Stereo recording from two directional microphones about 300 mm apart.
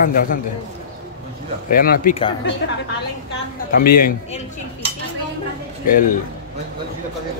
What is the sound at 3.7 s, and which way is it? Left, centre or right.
Speech, left.